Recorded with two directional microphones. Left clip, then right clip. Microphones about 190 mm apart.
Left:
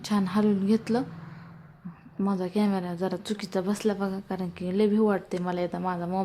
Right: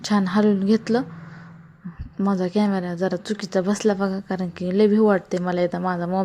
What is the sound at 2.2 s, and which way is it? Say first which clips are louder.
A woman's voice: right 6 dB; 20° right (ahead or behind).